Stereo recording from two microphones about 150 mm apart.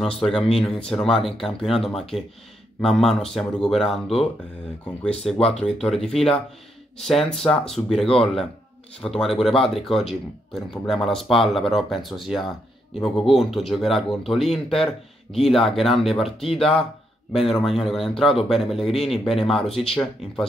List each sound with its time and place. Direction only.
0.2 s speech: centre (ahead or behind)
9.1 s speech: centre (ahead or behind)
16.5 s speech: 40° left (ahead or behind)
17.3 s speech: centre (ahead or behind)